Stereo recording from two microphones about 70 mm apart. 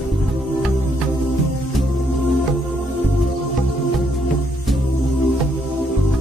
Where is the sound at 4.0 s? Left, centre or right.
Centre.